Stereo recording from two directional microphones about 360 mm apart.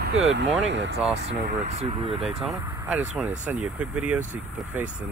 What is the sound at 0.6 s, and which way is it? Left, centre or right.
Speech, right.